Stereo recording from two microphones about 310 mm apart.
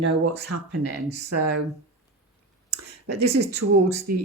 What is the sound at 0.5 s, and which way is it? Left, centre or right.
Speech, right.